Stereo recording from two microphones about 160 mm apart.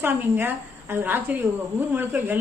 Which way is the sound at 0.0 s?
15° right (ahead or behind).